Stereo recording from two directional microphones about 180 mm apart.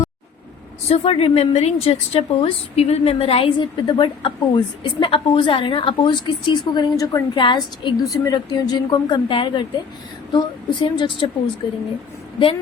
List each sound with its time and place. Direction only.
0.9 s a woman's voice: 35° left (ahead or behind)